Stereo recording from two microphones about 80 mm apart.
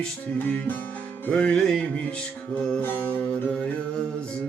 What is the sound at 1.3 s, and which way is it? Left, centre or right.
Music, centre.